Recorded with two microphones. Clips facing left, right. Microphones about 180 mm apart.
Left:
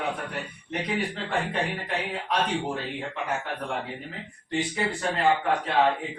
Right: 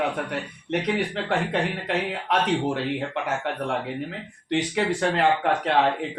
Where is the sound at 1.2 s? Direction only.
80° right.